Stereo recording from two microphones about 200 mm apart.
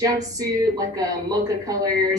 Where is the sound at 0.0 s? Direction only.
15° right (ahead or behind).